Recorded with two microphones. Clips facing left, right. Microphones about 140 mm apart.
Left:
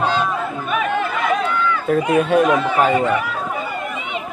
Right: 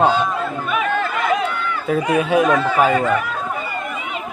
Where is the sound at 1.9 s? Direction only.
Centre (ahead or behind).